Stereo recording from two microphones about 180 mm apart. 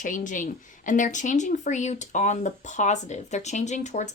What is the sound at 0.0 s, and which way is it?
Speech, 45° left (ahead or behind).